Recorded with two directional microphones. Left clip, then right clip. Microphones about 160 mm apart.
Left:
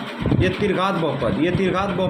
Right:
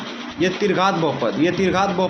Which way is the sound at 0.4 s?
20° right (ahead or behind).